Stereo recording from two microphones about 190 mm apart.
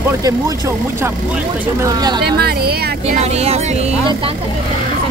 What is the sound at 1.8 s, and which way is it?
Speech, 20° right (ahead or behind).